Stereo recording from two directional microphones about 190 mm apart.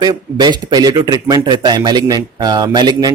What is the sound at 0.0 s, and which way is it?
Speech, 20° right (ahead or behind).